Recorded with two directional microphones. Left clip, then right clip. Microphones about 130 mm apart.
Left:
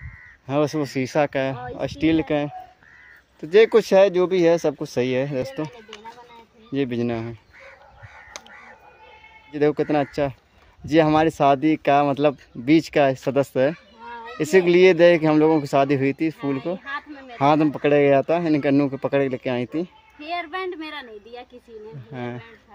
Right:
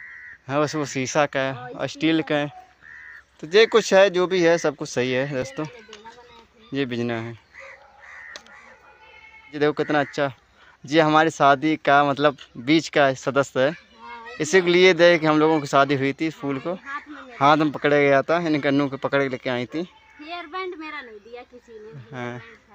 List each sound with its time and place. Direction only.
0.5 s speech: 20° left (ahead or behind)
3.3 s speech: 15° left (ahead or behind)
6.7 s speech: 10° left (ahead or behind)
9.5 s speech: 10° left (ahead or behind)
22.1 s speech: 15° left (ahead or behind)